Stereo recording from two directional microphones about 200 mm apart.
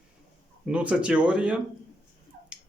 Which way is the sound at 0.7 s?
5° right (ahead or behind).